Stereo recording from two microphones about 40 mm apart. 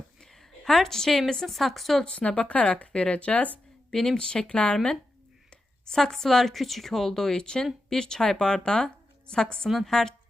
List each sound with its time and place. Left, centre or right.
0.2 s a sound: centre
1.3 s speech: centre
2.0 s speech: left
3.9 s speech: centre
5.9 s a woman's voice: centre
9.7 s speech: centre